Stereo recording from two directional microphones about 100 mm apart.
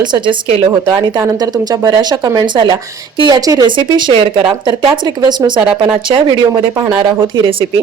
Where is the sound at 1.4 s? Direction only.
40° right (ahead or behind); by 4.3 s 60° right (ahead or behind).